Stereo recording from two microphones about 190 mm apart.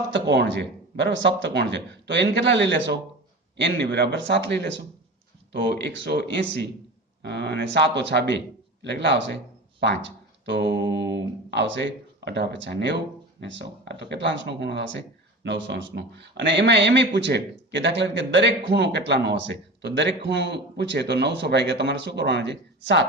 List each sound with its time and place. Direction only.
0.1 s a man's voice: 65° right (ahead or behind)
10.4 s a man's voice: 65° right (ahead or behind)